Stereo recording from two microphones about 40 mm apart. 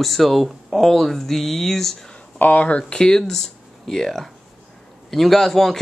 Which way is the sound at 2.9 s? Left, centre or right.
Centre.